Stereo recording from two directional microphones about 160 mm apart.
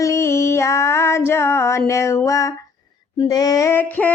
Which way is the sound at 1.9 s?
20° left (ahead or behind).